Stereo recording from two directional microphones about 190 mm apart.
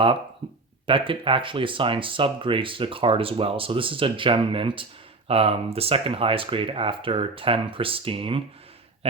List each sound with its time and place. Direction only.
0.9 s speech: 25° right (ahead or behind)